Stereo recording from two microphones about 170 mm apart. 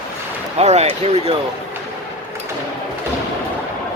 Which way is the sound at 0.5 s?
40° right (ahead or behind).